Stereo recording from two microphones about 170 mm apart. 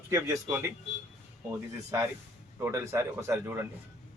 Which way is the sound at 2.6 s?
15° right (ahead or behind).